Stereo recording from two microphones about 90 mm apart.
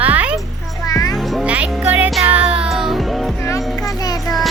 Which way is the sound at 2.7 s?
5° right (ahead or behind).